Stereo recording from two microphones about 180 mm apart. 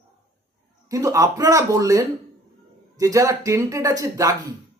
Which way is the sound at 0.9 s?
20° right (ahead or behind).